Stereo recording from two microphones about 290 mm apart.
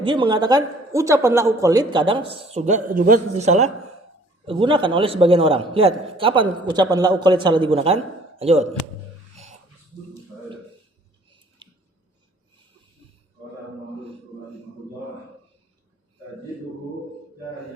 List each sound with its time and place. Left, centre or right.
0.0 s speech: centre
9.3 s a sound: right
11.6 s squish: centre